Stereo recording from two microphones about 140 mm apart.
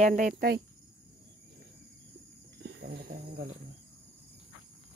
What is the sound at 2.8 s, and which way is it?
Cricket, 90° right.